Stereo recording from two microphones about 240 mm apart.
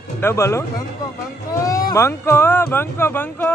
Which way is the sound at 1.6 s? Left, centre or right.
Centre.